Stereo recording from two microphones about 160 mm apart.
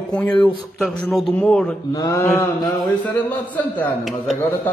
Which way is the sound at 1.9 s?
25° left (ahead or behind).